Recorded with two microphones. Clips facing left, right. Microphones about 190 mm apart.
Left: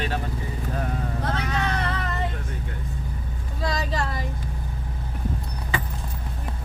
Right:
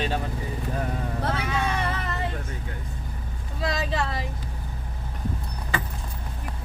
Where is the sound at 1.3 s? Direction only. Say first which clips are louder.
Left 2 dB; 10° right (ahead or behind).